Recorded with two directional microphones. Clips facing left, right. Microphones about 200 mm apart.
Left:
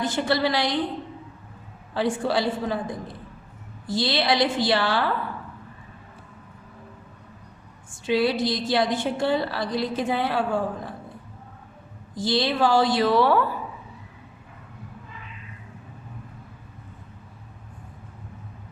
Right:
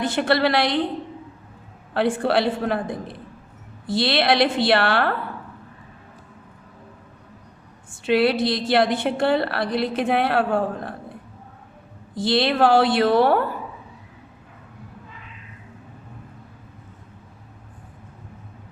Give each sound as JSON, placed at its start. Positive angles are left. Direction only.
{"t": 0.0, "sound": "a woman's voice", "side_deg": -60}
{"t": 1.9, "sound": "a woman's voice", "side_deg": -60}
{"t": 8.0, "sound": "a woman's voice", "side_deg": -65}
{"t": 12.1, "sound": "a woman's voice", "side_deg": -60}